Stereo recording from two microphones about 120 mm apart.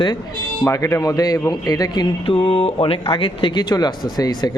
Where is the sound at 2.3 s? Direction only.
55° left (ahead or behind).